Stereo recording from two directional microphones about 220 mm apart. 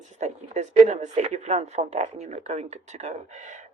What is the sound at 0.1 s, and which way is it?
Speech, 30° right (ahead or behind).